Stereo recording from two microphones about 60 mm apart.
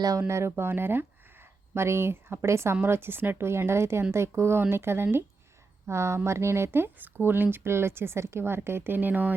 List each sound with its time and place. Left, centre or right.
0.2 s speech: right